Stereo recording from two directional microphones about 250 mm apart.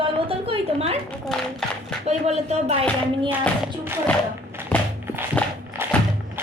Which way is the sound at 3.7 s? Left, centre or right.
Centre.